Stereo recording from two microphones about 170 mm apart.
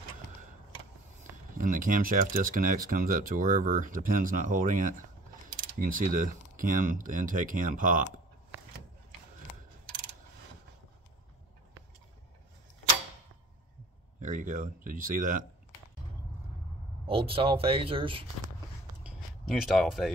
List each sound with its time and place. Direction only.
1.6 s speech: 50° right (ahead or behind)
14.2 s speech: 50° right (ahead or behind)
17.0 s speech: 35° right (ahead or behind)
19.0 s a sound: centre (ahead or behind)